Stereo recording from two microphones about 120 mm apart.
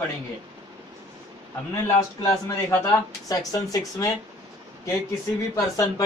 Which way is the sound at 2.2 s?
20° left (ahead or behind).